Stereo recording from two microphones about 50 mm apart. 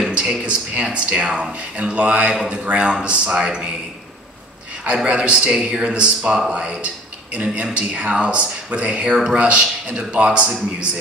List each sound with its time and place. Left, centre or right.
0.4 s speech: centre
4.8 s speech: right